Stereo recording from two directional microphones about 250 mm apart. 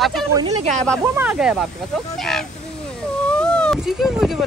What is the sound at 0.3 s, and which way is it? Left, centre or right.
Speech, centre.